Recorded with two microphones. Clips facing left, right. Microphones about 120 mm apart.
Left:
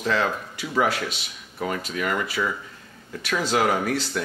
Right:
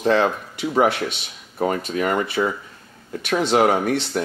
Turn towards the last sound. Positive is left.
turn(degrees=-25)  # may be behind; listen again after turning